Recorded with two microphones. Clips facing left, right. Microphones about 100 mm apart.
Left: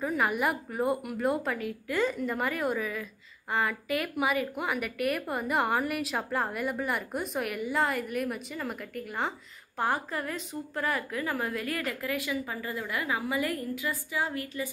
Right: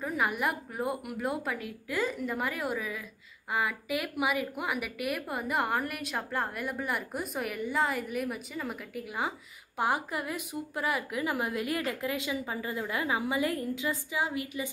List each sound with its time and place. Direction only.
0.0 s a woman's voice: centre (ahead or behind); by 14.7 s 15° right (ahead or behind)